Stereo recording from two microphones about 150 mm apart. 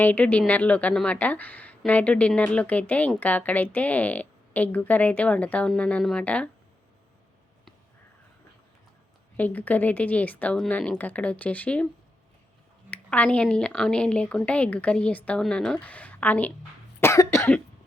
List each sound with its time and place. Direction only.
0.0 s a woman's voice: 10° left (ahead or behind)
9.4 s a woman's voice: 10° left (ahead or behind)
12.9 s a woman's voice: 10° left (ahead or behind)
17.0 s cough: 20° left (ahead or behind)